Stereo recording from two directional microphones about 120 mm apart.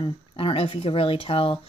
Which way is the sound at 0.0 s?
50° left (ahead or behind).